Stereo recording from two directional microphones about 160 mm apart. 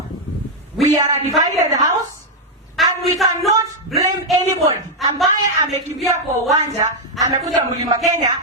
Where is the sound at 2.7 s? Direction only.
Centre (ahead or behind).